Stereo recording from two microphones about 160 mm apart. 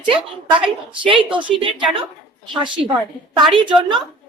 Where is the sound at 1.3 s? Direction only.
30° right (ahead or behind).